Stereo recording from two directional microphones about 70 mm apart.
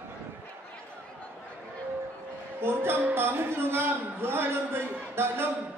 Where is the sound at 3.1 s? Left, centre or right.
Right.